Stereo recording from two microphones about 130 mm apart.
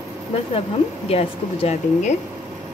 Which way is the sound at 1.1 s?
50° left (ahead or behind).